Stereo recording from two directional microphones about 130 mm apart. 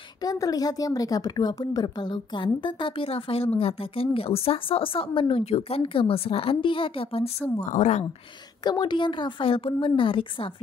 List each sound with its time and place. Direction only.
0.2 s a woman's voice: 30° left (ahead or behind); by 7.4 s 50° left (ahead or behind)
7.6 s a woman's voice: 65° left (ahead or behind)
8.6 s a woman's voice: 35° left (ahead or behind)